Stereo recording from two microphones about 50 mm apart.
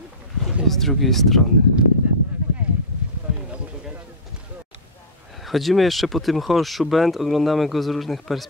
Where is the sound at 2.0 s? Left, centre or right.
Right.